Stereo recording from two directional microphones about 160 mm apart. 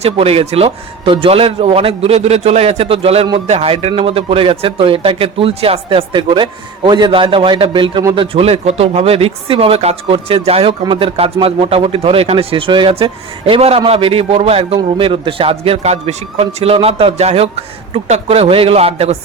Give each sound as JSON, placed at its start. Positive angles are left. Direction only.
{"t": 0.0, "sound": "a man's voice", "side_deg": -40}